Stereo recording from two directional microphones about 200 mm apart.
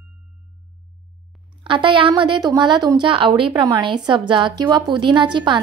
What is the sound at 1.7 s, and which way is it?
A woman's voice, 25° right (ahead or behind).